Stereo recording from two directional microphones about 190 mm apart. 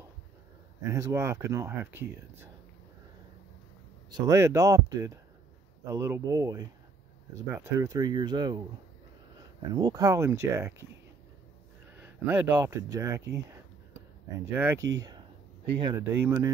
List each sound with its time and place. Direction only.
0.8 s speech: 15° right (ahead or behind)
4.1 s speech: 15° right (ahead or behind)
9.8 s speech: 20° right (ahead or behind)
12.0 s speech: 10° right (ahead or behind)
14.4 s speech: 10° right (ahead or behind)
15.0 s a sound: 20° right (ahead or behind)
15.8 s speech: 15° right (ahead or behind)